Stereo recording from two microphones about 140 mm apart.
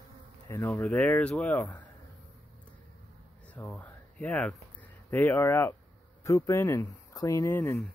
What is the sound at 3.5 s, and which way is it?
Speech, 10° left (ahead or behind).